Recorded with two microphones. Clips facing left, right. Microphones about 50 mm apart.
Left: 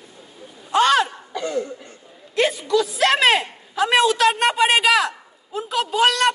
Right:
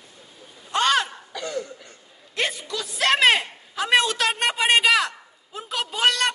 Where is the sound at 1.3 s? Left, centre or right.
Left.